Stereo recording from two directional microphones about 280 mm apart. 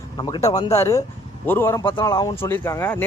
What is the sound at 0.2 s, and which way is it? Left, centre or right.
A man's voice, centre.